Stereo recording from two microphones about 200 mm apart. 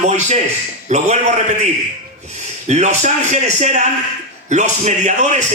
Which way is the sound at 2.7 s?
35° right (ahead or behind).